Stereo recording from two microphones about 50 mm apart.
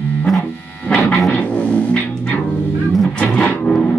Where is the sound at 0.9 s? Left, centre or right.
Left.